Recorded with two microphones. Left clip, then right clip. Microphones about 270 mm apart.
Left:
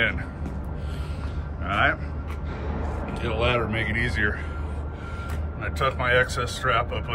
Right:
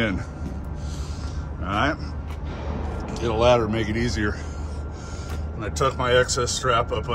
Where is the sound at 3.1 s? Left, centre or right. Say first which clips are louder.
Right 6 dB; centre.